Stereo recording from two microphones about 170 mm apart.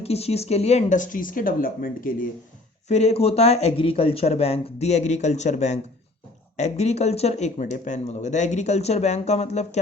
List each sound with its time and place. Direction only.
0.0 s speech: 35° left (ahead or behind); by 2.3 s 55° left (ahead or behind)
2.9 s speech: 40° left (ahead or behind)